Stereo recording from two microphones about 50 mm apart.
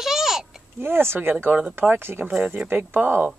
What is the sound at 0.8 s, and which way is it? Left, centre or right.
Speech, right.